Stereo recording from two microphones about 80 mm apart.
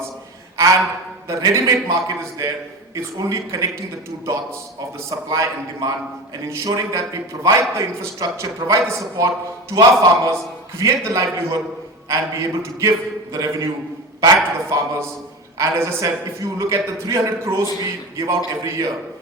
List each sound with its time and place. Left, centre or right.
1.3 s a man's voice: right
5.0 s a man's voice: right